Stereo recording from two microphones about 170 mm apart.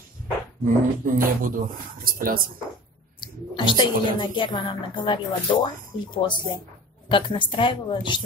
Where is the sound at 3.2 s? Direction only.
25° left (ahead or behind).